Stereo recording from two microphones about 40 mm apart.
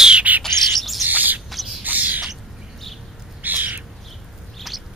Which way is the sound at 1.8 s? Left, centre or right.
Right.